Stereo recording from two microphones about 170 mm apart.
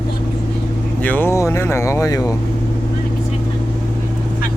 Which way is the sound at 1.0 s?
10° left (ahead or behind).